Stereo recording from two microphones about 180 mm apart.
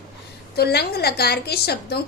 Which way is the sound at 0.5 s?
60° left (ahead or behind).